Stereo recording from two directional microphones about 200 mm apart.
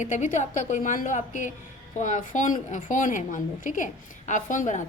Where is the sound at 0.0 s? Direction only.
40° left (ahead or behind).